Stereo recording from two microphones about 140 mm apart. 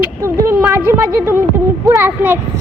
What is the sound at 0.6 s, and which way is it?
A child's voice, 10° right (ahead or behind).